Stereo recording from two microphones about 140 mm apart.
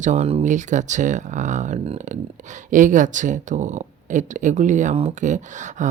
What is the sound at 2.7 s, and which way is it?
Speech, 65° right (ahead or behind).